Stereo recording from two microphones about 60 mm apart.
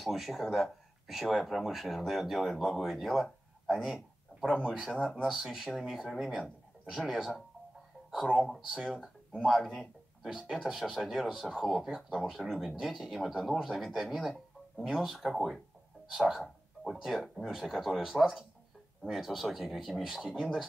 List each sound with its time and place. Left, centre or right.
0.0 s speech: centre
8.5 s speech: centre